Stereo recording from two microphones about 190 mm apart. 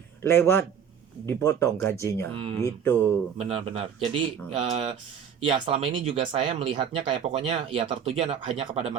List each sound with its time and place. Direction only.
0.2 s a man's voice: 10° left (ahead or behind)
2.3 s speech: 30° right (ahead or behind)